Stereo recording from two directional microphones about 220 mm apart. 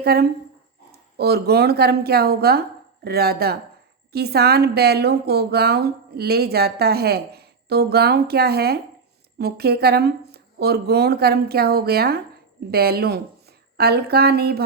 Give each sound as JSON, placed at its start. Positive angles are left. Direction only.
{"t": 0.0, "sound": "a woman's voice", "side_deg": -45}